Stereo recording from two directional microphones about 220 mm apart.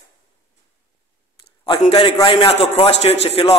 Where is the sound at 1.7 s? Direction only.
25° left (ahead or behind).